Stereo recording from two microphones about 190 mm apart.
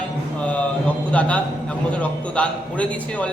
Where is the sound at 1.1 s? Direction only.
5° left (ahead or behind).